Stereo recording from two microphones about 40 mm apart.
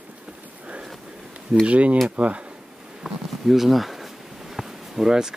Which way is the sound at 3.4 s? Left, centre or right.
Centre.